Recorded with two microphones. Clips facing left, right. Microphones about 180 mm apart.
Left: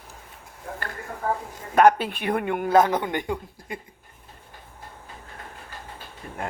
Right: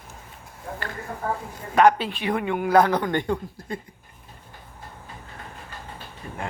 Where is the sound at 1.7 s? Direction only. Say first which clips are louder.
Left 1 dB; 50° left (ahead or behind).